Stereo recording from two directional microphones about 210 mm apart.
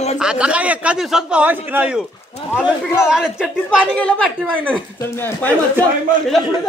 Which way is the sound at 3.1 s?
5° right (ahead or behind).